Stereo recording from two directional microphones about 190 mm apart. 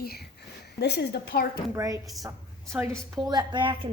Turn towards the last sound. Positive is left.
turn(degrees=-25)  # may be behind; listen again after turning